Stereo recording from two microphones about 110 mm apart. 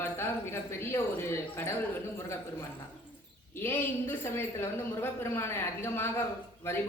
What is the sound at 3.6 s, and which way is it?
A woman's voice, 20° left (ahead or behind).